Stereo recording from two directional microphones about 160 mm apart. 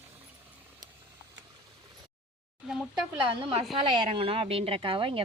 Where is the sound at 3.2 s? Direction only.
30° right (ahead or behind).